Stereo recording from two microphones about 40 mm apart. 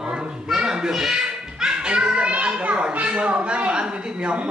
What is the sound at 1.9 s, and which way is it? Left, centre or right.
Children playing, right.